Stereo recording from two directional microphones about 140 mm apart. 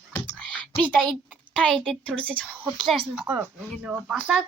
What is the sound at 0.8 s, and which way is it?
Speech, 35° right (ahead or behind).